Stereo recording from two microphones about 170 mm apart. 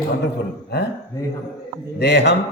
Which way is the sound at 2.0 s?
80° left.